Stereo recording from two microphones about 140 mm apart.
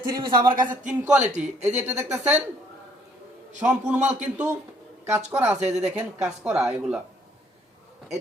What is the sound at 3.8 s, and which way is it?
Speech, 60° right (ahead or behind).